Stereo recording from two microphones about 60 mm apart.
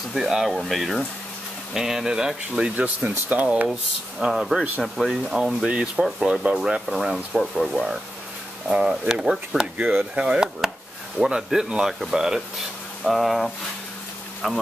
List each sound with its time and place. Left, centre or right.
0.1 s speech: centre
2.7 s speech: right
4.2 s speech: centre
8.6 s speech: centre